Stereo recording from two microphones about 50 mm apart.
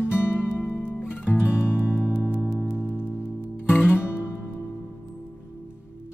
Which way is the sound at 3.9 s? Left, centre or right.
Left.